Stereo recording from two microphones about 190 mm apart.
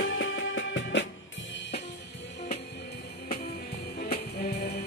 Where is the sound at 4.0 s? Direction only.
55° left (ahead or behind).